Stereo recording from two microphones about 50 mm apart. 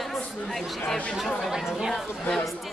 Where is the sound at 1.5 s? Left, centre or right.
Centre.